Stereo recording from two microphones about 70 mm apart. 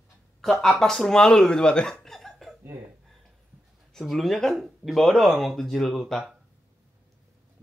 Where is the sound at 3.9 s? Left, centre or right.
Centre.